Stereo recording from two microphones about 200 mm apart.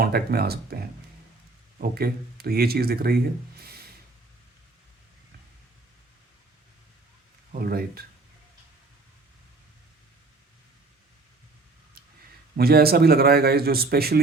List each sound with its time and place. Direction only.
0.0 s speech: 50° right (ahead or behind)
3.6 s a sound: 50° right (ahead or behind)
7.6 s speech: 50° right (ahead or behind)
12.5 s speech: 50° right (ahead or behind)